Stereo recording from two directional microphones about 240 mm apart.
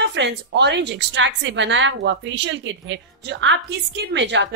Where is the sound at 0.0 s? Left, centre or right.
Right.